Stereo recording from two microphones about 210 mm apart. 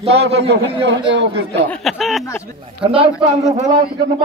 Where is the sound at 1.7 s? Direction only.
Centre (ahead or behind).